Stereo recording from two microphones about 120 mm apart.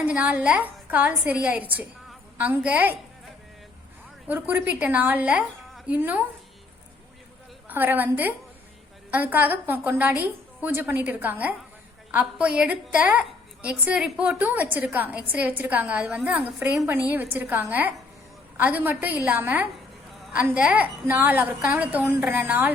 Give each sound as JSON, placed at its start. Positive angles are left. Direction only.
{"t": 0.0, "sound": "a woman's voice", "side_deg": -10}
{"t": 4.3, "sound": "a woman's voice", "side_deg": -15}
{"t": 7.7, "sound": "a woman's voice", "side_deg": -15}